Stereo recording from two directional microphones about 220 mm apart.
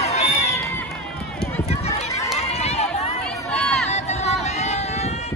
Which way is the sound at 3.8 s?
30° left (ahead or behind).